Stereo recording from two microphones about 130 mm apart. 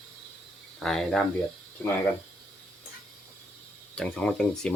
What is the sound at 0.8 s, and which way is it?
Speech, 5° left (ahead or behind).